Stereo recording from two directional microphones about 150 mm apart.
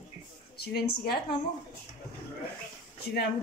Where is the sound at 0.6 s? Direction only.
90° left.